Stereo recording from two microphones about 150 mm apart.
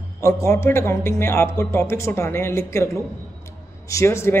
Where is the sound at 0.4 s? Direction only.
20° left (ahead or behind).